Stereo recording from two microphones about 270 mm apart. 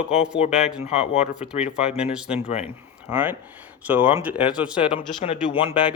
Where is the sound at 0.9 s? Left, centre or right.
Left.